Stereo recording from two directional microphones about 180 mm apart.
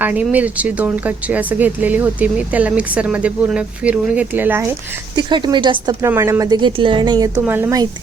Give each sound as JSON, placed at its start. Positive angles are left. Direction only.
{"t": 0.0, "sound": "speech", "side_deg": -10}
{"t": 5.1, "sound": "a woman's voice", "side_deg": -25}
{"t": 7.4, "sound": "speech", "side_deg": -10}